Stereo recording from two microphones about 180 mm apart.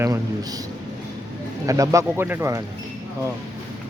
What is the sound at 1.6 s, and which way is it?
Speech, 20° right (ahead or behind).